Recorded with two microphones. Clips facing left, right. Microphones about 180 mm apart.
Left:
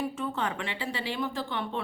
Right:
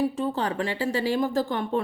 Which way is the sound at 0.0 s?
35° right (ahead or behind).